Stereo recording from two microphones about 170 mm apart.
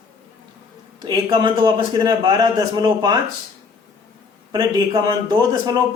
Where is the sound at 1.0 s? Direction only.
25° right (ahead or behind).